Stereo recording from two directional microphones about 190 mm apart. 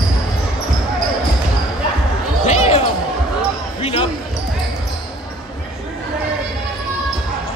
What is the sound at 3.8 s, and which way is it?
Basketball bounce, 30° left (ahead or behind).